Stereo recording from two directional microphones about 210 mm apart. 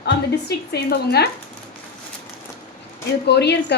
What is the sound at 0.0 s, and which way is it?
A woman's voice, 50° left (ahead or behind).